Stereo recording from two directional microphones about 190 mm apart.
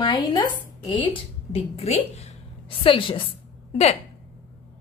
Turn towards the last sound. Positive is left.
turn(degrees=35)  # may be behind; listen again after turning